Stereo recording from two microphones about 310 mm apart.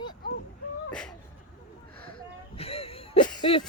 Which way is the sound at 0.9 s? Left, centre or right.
Centre.